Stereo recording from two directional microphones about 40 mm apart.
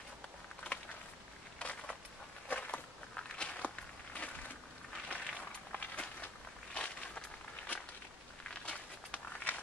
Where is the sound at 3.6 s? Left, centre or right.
Left.